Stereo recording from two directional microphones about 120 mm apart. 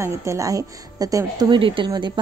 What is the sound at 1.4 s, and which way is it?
Speech, 45° right (ahead or behind).